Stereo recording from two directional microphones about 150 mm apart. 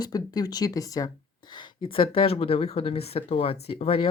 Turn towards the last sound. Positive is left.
turn(degrees=40)  # may be behind; listen again after turning